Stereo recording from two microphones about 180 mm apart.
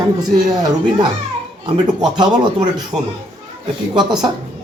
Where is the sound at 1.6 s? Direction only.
25° right (ahead or behind).